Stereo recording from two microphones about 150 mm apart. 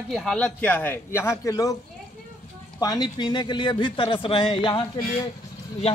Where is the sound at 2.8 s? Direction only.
25° left (ahead or behind).